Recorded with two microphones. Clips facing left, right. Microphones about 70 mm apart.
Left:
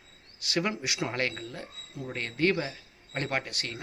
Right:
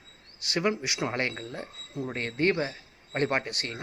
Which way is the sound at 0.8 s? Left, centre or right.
Right.